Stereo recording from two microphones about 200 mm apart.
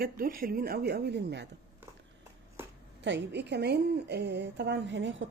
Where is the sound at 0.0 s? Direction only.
45° right (ahead or behind).